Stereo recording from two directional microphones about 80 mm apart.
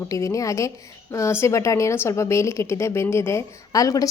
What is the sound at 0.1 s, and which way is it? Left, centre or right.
A woman's voice, left.